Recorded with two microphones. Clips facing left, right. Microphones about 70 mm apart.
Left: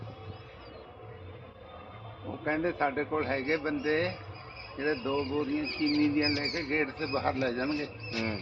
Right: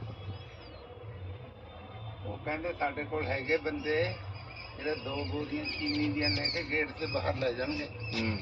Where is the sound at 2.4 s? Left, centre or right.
Left.